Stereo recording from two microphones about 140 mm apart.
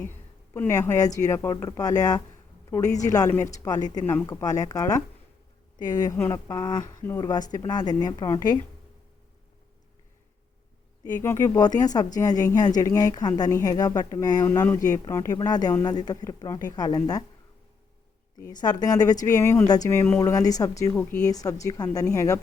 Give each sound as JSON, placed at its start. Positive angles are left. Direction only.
{"t": 0.0, "sound": "speech", "side_deg": 15}
{"t": 11.2, "sound": "speech", "side_deg": 20}
{"t": 18.3, "sound": "speech", "side_deg": 30}
{"t": 20.9, "sound": "a woman's voice", "side_deg": 15}
{"t": 21.2, "sound": "speech", "side_deg": 25}